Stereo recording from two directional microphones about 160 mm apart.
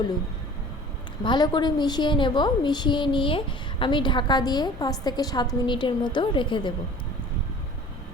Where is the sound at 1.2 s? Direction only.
30° left (ahead or behind).